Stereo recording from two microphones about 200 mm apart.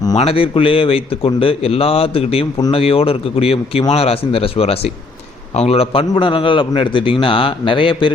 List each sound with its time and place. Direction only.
0.2 s speech: 30° left (ahead or behind)